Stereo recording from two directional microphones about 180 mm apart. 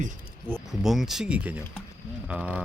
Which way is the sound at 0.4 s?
5° right (ahead or behind).